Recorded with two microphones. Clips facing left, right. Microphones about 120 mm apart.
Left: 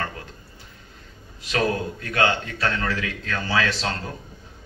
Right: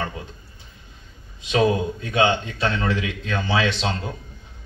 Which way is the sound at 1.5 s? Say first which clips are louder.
Right 4 dB; 20° right (ahead or behind).